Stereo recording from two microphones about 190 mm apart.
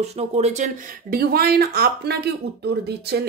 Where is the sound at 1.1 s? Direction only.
55° right (ahead or behind).